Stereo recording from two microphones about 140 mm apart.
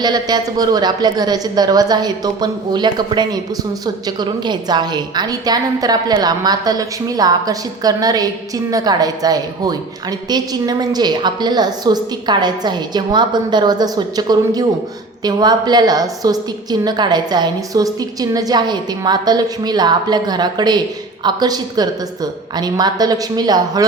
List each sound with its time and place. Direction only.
0.0 s a woman's voice: 30° right (ahead or behind)